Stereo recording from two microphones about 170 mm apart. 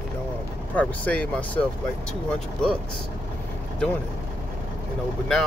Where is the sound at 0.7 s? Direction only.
10° left (ahead or behind).